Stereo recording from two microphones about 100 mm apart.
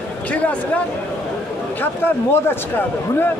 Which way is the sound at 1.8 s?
20° left (ahead or behind).